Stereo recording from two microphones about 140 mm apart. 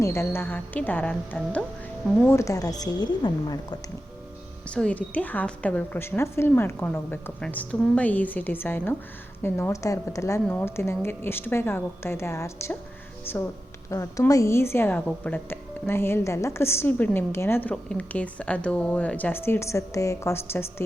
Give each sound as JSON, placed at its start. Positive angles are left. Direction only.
{"t": 0.0, "sound": "a woman's voice", "side_deg": 20}
{"t": 4.7, "sound": "a woman's voice", "side_deg": 10}